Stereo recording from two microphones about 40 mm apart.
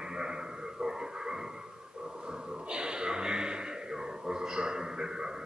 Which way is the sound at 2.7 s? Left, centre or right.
Right.